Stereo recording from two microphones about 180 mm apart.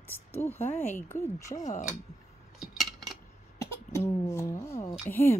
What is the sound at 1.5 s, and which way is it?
Speech, 45° left (ahead or behind).